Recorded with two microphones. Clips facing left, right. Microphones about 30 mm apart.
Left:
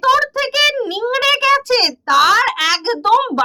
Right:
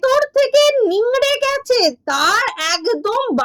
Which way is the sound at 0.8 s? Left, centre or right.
Left.